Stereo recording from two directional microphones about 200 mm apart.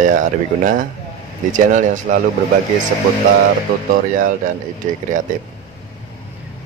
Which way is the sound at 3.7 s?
50° right (ahead or behind).